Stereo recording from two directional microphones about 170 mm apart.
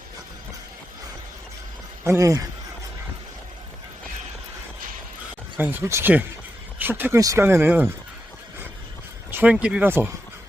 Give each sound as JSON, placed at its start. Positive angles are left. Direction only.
{"t": 2.0, "sound": "speech", "side_deg": -20}
{"t": 5.5, "sound": "speech", "side_deg": -10}
{"t": 9.3, "sound": "speech", "side_deg": -10}